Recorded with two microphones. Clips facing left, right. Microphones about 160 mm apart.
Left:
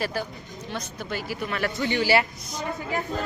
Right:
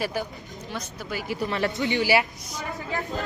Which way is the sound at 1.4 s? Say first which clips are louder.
Right 3 dB; 25° right (ahead or behind).